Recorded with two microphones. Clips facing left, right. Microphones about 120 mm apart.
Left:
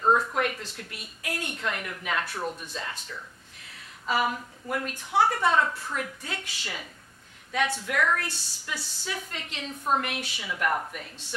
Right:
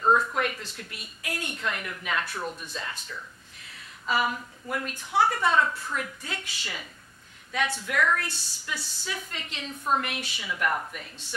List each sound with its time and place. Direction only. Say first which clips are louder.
0.0 s a sound: even; 35° left (ahead or behind)
0.4 s a woman's voice: left 1 dB; 50° left (ahead or behind)
4.1 s a woman's voice: even; 50° left (ahead or behind)
10.5 s speech: left 1 dB; 40° left (ahead or behind)